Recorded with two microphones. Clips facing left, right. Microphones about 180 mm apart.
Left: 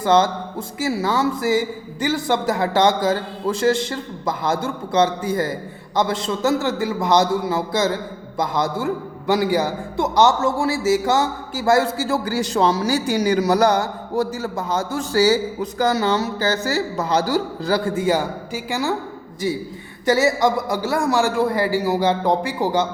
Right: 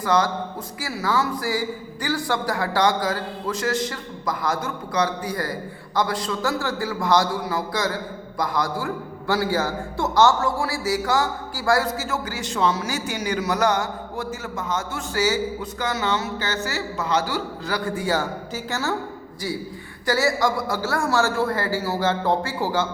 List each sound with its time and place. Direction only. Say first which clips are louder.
0.0 s a man's voice: left 4 dB; 25° left (ahead or behind)